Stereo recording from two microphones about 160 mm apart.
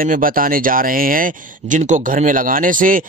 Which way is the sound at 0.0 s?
60° right (ahead or behind).